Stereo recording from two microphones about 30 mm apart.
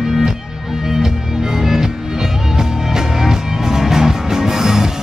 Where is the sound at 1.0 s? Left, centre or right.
Centre.